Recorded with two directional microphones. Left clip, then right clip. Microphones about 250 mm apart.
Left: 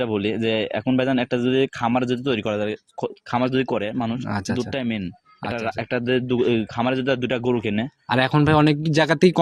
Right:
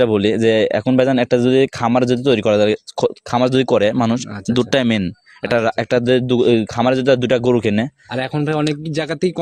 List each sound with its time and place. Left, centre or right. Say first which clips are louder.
0.0 s speech: right 9 dB; right
8.1 s speech: left 3 dB; centre